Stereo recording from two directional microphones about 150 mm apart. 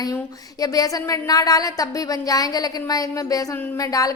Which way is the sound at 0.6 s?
25° left (ahead or behind).